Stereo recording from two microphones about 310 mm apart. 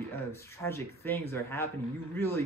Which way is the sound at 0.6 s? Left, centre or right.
Centre.